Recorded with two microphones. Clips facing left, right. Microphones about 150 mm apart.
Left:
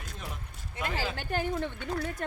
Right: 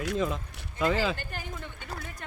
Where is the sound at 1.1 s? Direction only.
65° left (ahead or behind).